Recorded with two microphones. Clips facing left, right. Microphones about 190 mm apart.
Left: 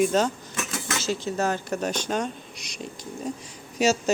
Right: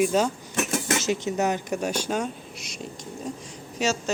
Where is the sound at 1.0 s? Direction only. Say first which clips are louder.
Left 2 dB; 20° right (ahead or behind); by 2.9 s centre (ahead or behind).